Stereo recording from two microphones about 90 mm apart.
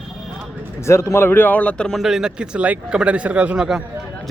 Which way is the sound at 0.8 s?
30° left (ahead or behind).